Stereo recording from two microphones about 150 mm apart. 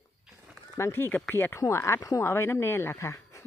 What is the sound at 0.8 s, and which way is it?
Speech, 15° left (ahead or behind).